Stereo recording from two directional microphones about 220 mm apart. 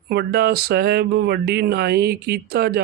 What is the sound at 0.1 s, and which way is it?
Speech, 45° right (ahead or behind).